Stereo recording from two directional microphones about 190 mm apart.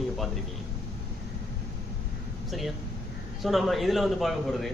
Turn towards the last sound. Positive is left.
turn(degrees=0)  # may be behind; listen again after turning